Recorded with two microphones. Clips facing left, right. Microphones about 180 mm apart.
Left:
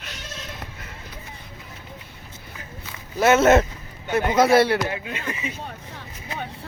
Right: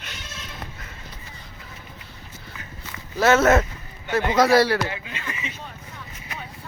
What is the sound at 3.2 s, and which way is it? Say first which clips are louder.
A man's voice: left 1 dB; 20° left (ahead or behind).